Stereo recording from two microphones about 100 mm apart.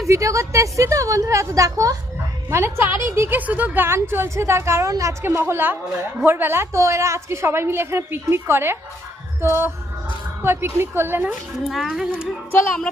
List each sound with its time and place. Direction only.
0.1 s a woman's voice: 30° right (ahead or behind)
2.5 s a woman's voice: 25° right (ahead or behind)
11.3 s speech: centre (ahead or behind)